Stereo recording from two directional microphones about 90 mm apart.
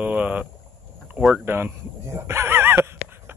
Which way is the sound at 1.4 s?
25° right (ahead or behind).